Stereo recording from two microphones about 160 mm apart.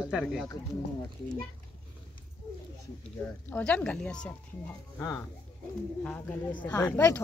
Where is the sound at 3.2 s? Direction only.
10° left (ahead or behind).